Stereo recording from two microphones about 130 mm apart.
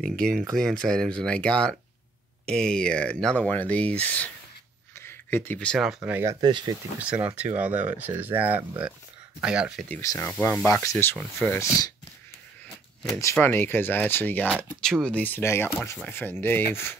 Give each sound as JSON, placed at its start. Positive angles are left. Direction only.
{"t": 0.1, "sound": "speech", "side_deg": 5}
{"t": 4.9, "sound": "a sound", "side_deg": 20}
{"t": 5.8, "sound": "speech", "side_deg": -5}
{"t": 6.4, "sound": "speech", "side_deg": -35}
{"t": 7.0, "sound": "speech", "side_deg": -10}
{"t": 10.0, "sound": "speech", "side_deg": 20}
{"t": 13.2, "sound": "speech", "side_deg": 20}